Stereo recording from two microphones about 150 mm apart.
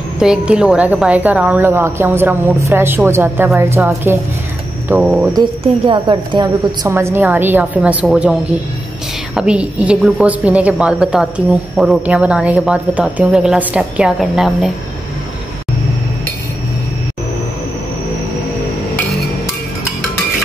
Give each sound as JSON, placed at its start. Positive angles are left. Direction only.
{"t": 0.2, "sound": "a woman's voice", "side_deg": -5}
{"t": 5.3, "sound": "a woman's voice", "side_deg": -30}